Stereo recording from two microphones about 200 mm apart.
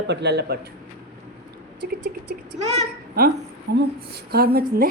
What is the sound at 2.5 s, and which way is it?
Speech, 35° right (ahead or behind).